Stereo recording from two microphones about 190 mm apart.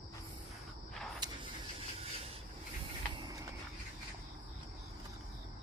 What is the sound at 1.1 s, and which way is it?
Vehicle, 20° right (ahead or behind).